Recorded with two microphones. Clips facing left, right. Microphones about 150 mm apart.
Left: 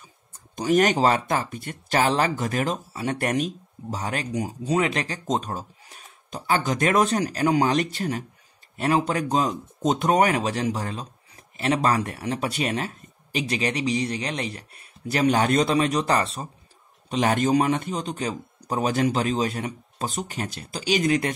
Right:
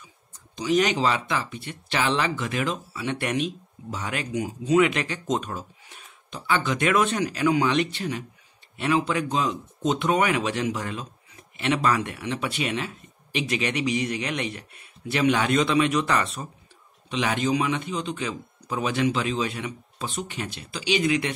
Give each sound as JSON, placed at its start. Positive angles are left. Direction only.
{"t": 0.3, "sound": "speech", "side_deg": 50}
{"t": 17.1, "sound": "a man's voice", "side_deg": 45}